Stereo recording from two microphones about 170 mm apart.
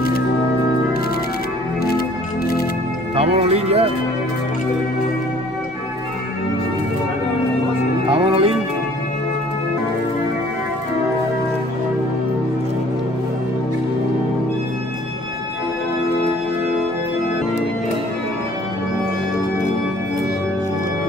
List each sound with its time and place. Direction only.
1.9 s music: 65° left (ahead or behind)
3.2 s speech: 35° right (ahead or behind)
8.1 s music: 30° right (ahead or behind)